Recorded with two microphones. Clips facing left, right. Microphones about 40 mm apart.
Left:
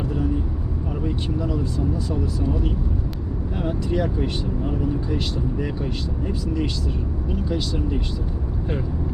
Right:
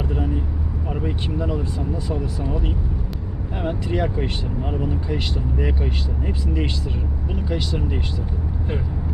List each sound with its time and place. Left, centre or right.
1.0 s speech: right